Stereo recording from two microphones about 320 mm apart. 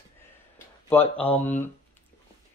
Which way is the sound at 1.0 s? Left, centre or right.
Centre.